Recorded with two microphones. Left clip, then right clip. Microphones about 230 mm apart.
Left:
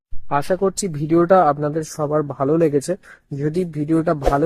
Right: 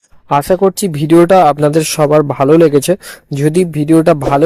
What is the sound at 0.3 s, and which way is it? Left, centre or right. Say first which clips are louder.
Speech: right 8 dB; right.